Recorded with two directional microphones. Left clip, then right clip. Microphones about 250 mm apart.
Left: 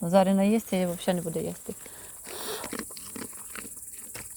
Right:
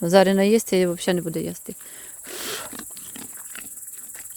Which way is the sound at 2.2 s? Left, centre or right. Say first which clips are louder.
Right 4 dB; right.